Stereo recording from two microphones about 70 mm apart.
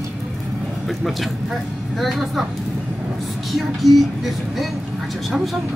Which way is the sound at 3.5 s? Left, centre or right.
Centre.